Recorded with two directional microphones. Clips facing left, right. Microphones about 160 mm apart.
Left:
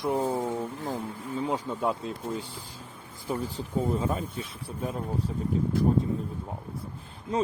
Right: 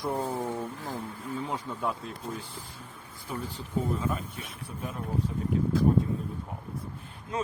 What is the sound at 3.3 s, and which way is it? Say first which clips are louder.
Speech: left 3 dB; 30° left (ahead or behind).